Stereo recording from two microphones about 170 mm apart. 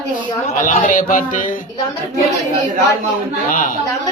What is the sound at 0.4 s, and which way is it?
A woman's voice, 45° left (ahead or behind).